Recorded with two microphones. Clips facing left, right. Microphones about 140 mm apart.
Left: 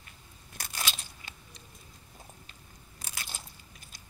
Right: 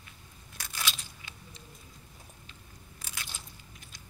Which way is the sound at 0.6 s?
40° left (ahead or behind).